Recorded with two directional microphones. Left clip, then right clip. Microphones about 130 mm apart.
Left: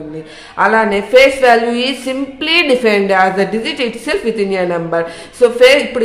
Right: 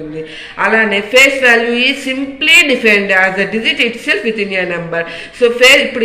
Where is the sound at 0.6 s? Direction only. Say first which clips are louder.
Right 1 dB; 40° left (ahead or behind).